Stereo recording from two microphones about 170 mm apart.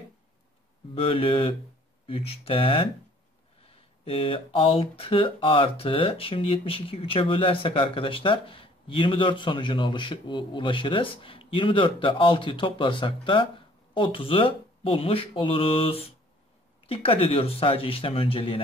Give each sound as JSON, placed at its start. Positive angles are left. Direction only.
{"t": 0.9, "sound": "speech", "side_deg": 30}